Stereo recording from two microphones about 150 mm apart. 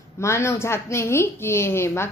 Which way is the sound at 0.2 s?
20° left (ahead or behind).